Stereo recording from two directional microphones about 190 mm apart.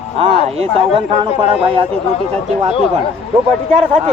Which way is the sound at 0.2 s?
30° right (ahead or behind).